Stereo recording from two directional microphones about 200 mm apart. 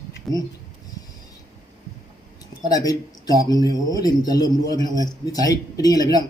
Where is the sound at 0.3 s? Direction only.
Centre (ahead or behind).